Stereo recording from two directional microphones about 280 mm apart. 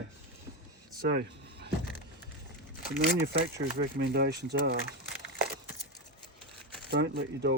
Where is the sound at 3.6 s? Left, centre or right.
Right.